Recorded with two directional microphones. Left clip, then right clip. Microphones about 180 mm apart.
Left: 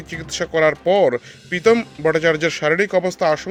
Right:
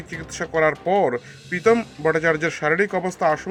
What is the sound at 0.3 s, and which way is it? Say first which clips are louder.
Speech: left 3 dB; 40° left (ahead or behind).